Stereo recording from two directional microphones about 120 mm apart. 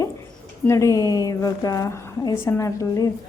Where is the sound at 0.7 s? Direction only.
25° left (ahead or behind).